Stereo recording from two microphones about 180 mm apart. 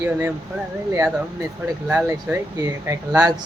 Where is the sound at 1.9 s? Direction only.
10° right (ahead or behind).